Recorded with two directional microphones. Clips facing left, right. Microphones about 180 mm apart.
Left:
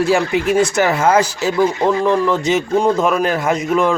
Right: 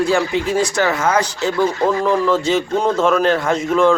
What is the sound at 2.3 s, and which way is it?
A man's voice, 20° left (ahead or behind).